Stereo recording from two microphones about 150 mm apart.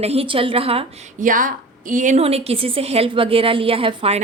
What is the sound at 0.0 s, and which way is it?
Speech, 40° right (ahead or behind).